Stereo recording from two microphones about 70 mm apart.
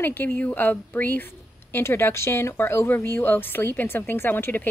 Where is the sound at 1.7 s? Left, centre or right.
Left.